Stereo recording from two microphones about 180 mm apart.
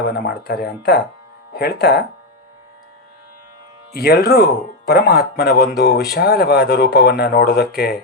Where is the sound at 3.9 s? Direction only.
65° left (ahead or behind).